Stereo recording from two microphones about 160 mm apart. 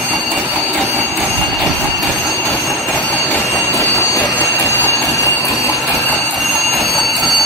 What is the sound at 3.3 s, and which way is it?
Train, 15° left (ahead or behind).